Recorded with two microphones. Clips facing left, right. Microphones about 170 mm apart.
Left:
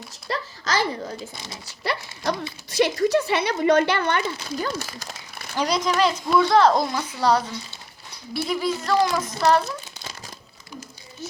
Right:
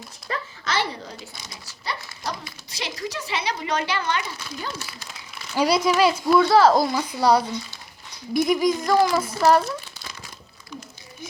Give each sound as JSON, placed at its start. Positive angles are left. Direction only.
{"t": 0.3, "sound": "a sound", "side_deg": 40}
{"t": 1.6, "sound": "speech", "side_deg": 60}
{"t": 4.4, "sound": "speech", "side_deg": 40}
{"t": 5.5, "sound": "speech", "side_deg": -10}